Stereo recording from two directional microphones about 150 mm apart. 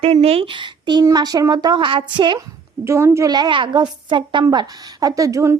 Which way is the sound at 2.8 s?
20° right (ahead or behind).